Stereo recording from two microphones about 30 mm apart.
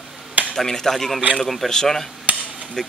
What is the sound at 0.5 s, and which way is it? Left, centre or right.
Speech, centre.